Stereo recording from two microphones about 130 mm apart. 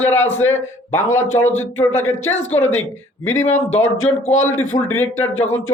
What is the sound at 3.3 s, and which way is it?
Speech, 60° left (ahead or behind).